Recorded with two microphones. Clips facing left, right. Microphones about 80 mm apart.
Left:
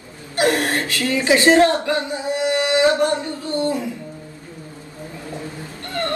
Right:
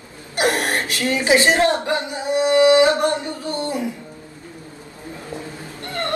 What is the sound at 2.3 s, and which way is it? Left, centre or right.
Singing, right.